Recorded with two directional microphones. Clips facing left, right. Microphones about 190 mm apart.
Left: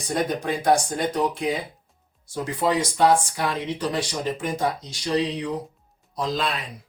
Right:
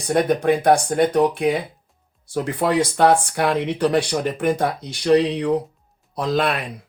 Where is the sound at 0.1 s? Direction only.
60° right (ahead or behind).